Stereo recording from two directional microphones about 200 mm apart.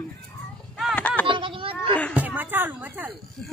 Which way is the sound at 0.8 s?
5° left (ahead or behind).